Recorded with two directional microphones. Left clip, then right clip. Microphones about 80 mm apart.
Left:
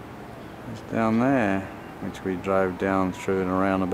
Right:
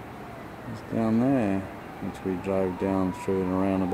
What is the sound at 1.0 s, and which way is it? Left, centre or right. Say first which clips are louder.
Speech: left 3 dB; right.